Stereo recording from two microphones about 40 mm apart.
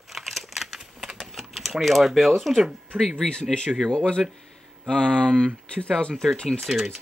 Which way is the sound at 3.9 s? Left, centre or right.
Left.